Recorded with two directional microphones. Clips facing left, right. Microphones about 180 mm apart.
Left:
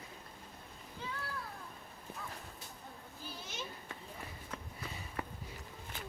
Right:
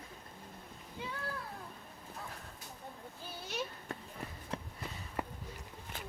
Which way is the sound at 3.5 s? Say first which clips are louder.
Right 9 dB; 65° right (ahead or behind).